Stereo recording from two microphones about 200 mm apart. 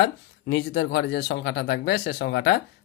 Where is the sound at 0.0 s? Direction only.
65° left (ahead or behind).